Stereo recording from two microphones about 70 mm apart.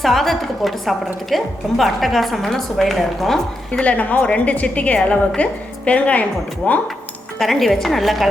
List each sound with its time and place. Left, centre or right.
0.0 s a woman's voice: centre
3.7 s a woman's voice: centre
7.3 s a woman's voice: centre